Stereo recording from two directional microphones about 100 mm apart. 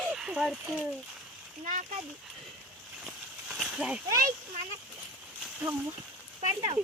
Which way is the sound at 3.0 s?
Centre (ahead or behind).